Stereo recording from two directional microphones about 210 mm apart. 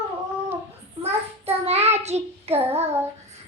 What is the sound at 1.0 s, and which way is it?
Child singing, 30° right (ahead or behind).